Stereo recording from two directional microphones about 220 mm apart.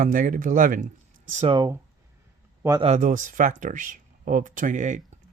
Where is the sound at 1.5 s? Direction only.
20° right (ahead or behind).